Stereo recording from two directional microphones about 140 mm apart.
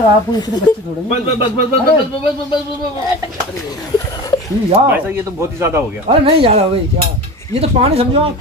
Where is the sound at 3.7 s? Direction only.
25° left (ahead or behind).